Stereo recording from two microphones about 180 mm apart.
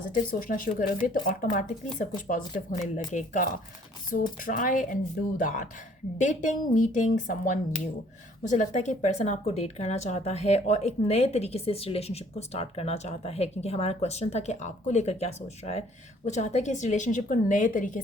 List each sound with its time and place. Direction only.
0.3 s a woman's voice: 50° left (ahead or behind)